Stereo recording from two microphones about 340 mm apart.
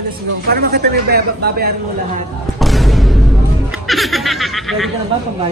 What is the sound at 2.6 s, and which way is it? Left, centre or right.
Music, centre.